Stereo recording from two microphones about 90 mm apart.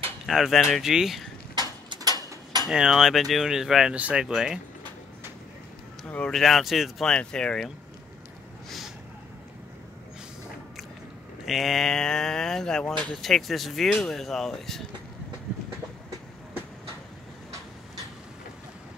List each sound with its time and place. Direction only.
0.3 s speech: centre (ahead or behind)
2.0 s a sound: 45° right (ahead or behind)
2.7 s speech: 5° right (ahead or behind)
6.0 s speech: 15° left (ahead or behind)
6.3 s speech: centre (ahead or behind)
7.1 s speech: 10° left (ahead or behind)
8.6 s a sound: centre (ahead or behind)
11.4 s speech: centre (ahead or behind)